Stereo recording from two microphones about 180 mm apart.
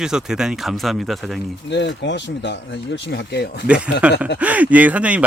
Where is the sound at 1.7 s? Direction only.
75° left (ahead or behind).